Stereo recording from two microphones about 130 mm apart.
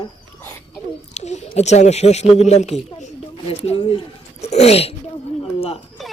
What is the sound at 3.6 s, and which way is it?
Speech, 45° left (ahead or behind).